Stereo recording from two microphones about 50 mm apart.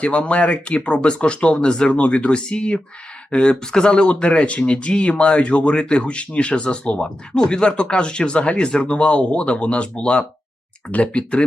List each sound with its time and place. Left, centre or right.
0.0 s speech: left